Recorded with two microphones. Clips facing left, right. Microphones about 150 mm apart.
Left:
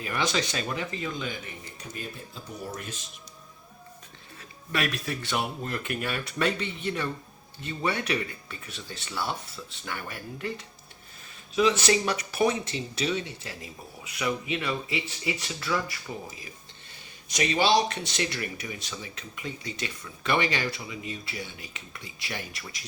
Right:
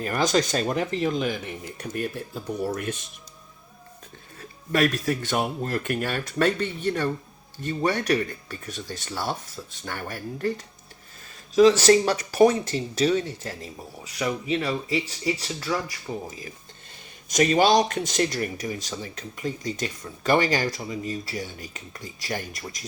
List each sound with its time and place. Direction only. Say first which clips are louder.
0.0 s speech: right 6 dB; 45° right (ahead or behind)
0.9 s speech: right 8 dB; 70° right (ahead or behind)
1.8 s speech: right 10 dB; 65° right (ahead or behind)
4.4 s speech: right 7 dB; 45° right (ahead or behind)
17.2 s speech: right 5 dB; 45° right (ahead or behind)